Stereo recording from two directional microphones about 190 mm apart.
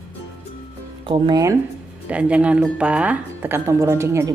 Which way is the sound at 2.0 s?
5° right (ahead or behind).